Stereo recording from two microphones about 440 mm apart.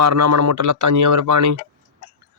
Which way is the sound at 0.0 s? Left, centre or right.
Right.